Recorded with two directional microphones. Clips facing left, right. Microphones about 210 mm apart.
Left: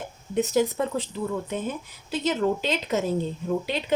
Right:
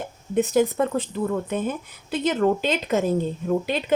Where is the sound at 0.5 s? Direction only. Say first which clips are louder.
Right 3 dB; 50° right (ahead or behind).